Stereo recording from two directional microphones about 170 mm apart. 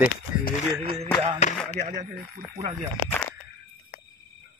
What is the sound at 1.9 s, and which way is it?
Speech, 45° right (ahead or behind).